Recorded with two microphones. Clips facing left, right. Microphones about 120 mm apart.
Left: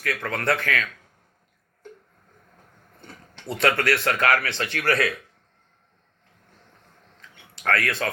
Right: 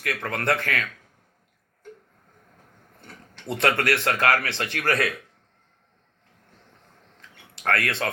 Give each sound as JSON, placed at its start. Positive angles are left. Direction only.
{"t": 0.0, "sound": "speech", "side_deg": -25}
{"t": 3.0, "sound": "a sound", "side_deg": 0}
{"t": 3.4, "sound": "speech", "side_deg": -25}
{"t": 7.6, "sound": "speech", "side_deg": -25}